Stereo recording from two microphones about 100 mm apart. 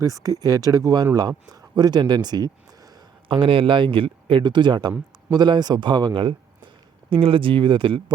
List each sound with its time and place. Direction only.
0.0 s speech: 35° right (ahead or behind)
3.2 s speech: 60° right (ahead or behind)